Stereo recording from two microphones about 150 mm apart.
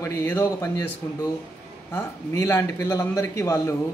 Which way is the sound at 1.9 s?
20° left (ahead or behind).